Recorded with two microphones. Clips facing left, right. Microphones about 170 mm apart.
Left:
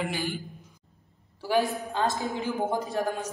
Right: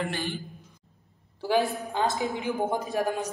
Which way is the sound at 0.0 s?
10° left (ahead or behind).